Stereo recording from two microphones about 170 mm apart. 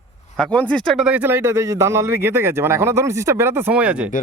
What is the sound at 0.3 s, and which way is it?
Speech, 5° left (ahead or behind).